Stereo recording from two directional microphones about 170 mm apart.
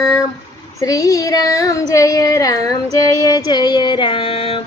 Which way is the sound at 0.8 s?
20° left (ahead or behind).